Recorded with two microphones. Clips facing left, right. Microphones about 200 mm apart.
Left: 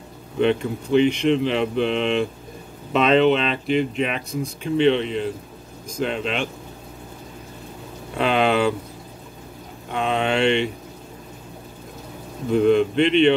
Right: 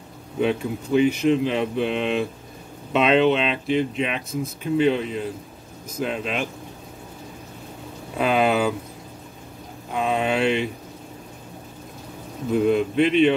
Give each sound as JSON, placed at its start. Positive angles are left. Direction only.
{"t": 0.4, "sound": "speech", "side_deg": -5}
{"t": 8.2, "sound": "speech", "side_deg": -5}
{"t": 9.8, "sound": "a sound", "side_deg": -5}
{"t": 12.4, "sound": "speech", "side_deg": -5}